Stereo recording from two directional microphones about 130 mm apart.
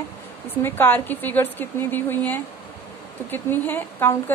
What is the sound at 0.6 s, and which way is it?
A woman's voice, 15° left (ahead or behind).